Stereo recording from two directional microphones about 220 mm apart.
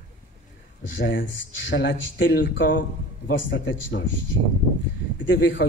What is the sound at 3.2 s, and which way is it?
Speech, 60° left (ahead or behind).